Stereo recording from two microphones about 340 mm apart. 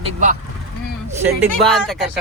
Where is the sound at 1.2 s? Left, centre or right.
Centre.